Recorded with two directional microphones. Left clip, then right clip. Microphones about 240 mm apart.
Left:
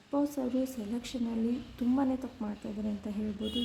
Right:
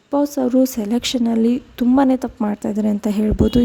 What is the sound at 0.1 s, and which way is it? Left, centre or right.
Speech, right.